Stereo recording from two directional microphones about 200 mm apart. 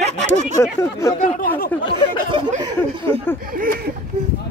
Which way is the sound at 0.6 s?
15° left (ahead or behind).